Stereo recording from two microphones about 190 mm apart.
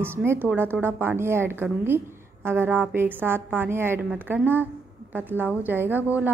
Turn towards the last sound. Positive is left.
turn(degrees=-10)  # may be behind; listen again after turning